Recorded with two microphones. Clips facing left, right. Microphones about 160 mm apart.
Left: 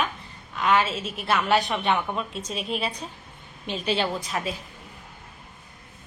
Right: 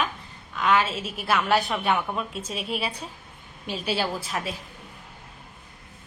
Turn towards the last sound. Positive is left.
turn(degrees=0)  # may be behind; listen again after turning